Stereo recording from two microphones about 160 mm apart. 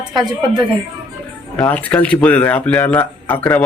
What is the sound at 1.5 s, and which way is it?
Speech, 10° left (ahead or behind).